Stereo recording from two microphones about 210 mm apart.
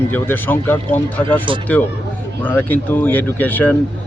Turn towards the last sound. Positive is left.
turn(degrees=10)  # may be behind; listen again after turning